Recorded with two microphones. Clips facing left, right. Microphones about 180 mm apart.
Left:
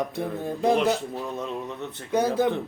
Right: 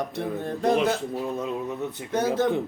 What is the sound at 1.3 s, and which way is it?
Speech, 10° right (ahead or behind).